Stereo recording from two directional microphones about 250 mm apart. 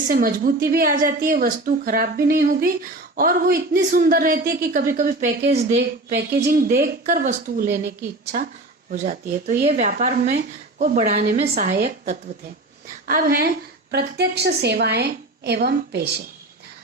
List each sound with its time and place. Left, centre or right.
0.1 s speech: right
8.2 s a woman's voice: right